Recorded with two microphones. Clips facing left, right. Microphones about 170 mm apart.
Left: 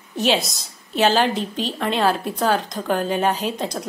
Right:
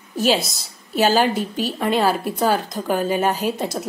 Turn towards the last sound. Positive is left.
turn(degrees=-5)  # may be behind; listen again after turning